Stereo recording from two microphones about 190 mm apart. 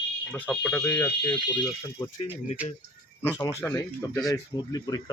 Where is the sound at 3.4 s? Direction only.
20° left (ahead or behind).